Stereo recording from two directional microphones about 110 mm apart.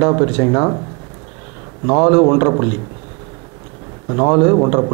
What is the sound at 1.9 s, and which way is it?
Speech, 20° right (ahead or behind).